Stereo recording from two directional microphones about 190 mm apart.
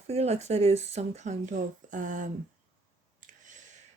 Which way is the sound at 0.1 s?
35° right (ahead or behind).